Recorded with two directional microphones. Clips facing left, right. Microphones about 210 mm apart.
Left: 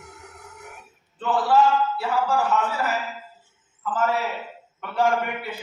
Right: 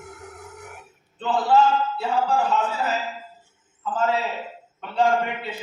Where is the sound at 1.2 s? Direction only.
25° right (ahead or behind).